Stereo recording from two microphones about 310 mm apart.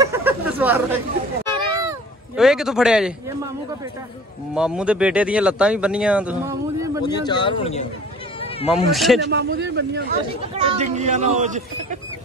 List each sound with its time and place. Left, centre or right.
0.0 s chatter: centre
0.6 s speech: centre
1.8 s a sound: centre
4.6 s speech: centre
7.1 s speech: centre
8.6 s speech: centre
9.2 s a man's voice: right
10.5 s speech: centre